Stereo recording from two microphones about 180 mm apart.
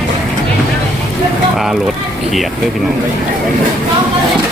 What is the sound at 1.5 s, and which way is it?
Speech, centre (ahead or behind).